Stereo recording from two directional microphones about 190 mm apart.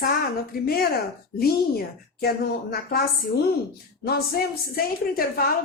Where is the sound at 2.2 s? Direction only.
55° left (ahead or behind).